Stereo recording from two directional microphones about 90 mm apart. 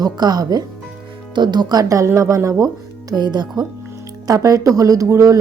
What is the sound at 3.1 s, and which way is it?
Speech, 55° right (ahead or behind).